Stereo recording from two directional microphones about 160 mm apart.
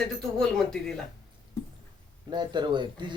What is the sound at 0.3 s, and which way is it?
Speech, 5° left (ahead or behind).